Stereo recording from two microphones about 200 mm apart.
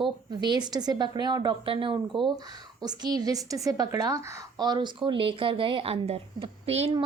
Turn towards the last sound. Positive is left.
turn(degrees=-30)  # may be behind; listen again after turning